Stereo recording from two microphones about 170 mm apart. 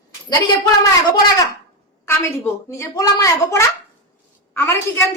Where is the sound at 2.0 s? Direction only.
15° left (ahead or behind).